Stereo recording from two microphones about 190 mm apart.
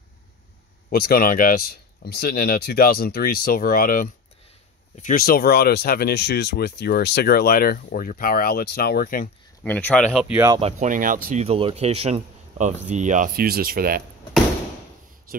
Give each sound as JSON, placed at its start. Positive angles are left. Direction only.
{"t": 0.8, "sound": "speech", "side_deg": 50}
{"t": 9.6, "sound": "speech", "side_deg": 5}
{"t": 10.5, "sound": "speech", "side_deg": -35}
{"t": 11.4, "sound": "speech", "side_deg": -30}